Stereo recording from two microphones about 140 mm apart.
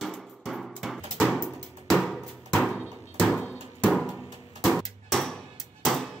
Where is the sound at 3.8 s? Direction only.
5° left (ahead or behind).